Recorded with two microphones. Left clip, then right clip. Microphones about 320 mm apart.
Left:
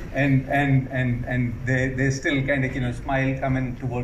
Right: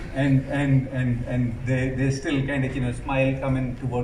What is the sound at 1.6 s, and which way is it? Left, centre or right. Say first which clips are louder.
A man's voice: left 3 dB; centre.